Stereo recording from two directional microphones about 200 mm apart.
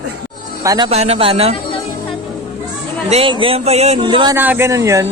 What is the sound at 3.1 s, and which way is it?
Speech, 25° right (ahead or behind).